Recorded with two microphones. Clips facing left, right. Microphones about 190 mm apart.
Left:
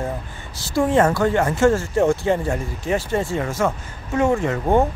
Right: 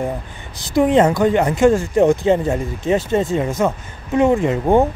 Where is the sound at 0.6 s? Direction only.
20° right (ahead or behind).